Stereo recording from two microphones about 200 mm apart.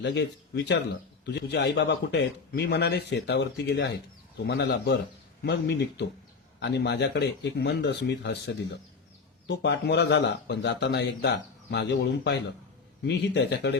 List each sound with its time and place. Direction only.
0.0 s speech: 60° left (ahead or behind)